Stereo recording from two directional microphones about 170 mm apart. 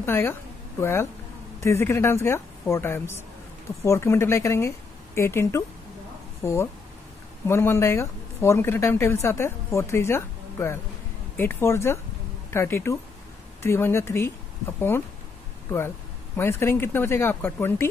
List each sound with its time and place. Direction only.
0.0 s a woman's voice: 15° left (ahead or behind)
16.3 s a woman's voice: 15° left (ahead or behind)